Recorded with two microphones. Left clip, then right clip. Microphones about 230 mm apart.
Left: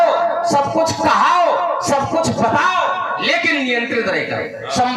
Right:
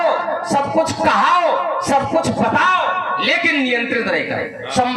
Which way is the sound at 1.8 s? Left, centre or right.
Right.